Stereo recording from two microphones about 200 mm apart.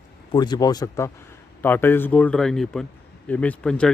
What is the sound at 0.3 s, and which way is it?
Speech, 20° left (ahead or behind).